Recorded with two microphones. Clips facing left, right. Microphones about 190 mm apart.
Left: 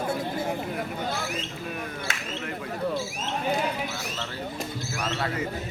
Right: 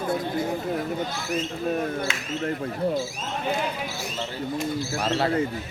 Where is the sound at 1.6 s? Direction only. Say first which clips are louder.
Right 9 dB; 35° right (ahead or behind).